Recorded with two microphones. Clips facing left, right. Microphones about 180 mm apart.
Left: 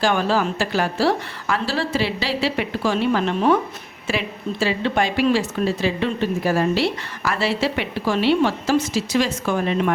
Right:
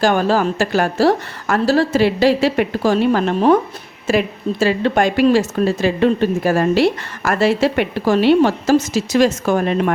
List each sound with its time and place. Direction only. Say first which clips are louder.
0.0 s speech: right 4 dB; 45° right (ahead or behind)